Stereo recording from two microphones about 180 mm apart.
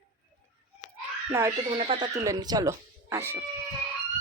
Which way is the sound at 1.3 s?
15° right (ahead or behind).